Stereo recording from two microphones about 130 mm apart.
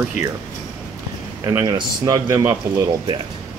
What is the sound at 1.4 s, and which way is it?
Speech, 25° right (ahead or behind).